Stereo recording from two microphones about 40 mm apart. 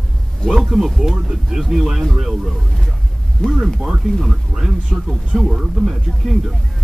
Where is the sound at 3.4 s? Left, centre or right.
Left.